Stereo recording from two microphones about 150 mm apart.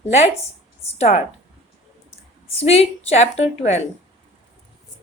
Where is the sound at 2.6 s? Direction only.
45° left (ahead or behind).